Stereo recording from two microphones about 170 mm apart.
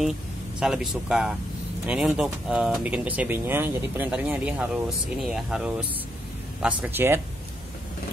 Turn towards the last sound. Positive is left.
turn(degrees=-10)  # may be behind; listen again after turning